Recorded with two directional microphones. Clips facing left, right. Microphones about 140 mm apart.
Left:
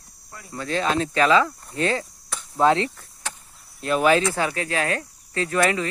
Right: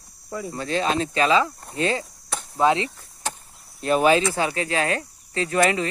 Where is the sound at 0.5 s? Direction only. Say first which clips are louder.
Left 1 dB; 25° right (ahead or behind).